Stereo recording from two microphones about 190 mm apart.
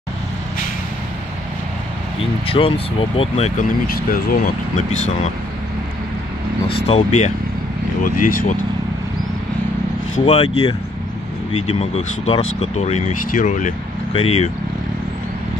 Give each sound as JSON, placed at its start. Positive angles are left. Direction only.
{"t": 2.4, "sound": "speech", "side_deg": 30}
{"t": 3.8, "sound": "speech", "side_deg": 50}
{"t": 6.7, "sound": "speech", "side_deg": 30}
{"t": 10.1, "sound": "speech", "side_deg": 35}
{"t": 11.6, "sound": "speech", "side_deg": 30}